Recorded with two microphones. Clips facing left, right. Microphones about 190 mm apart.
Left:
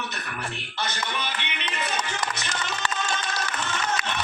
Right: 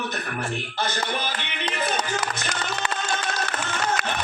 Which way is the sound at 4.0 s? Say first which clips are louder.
Right 3 dB; 60° right (ahead or behind).